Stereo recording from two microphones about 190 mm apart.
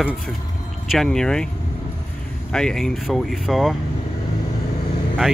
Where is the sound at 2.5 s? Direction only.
5° left (ahead or behind).